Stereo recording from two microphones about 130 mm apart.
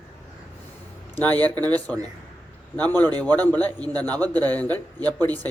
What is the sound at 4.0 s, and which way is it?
Speech, 30° right (ahead or behind).